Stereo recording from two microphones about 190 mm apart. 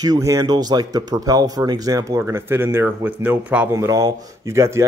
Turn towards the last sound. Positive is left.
turn(degrees=-15)  # may be behind; listen again after turning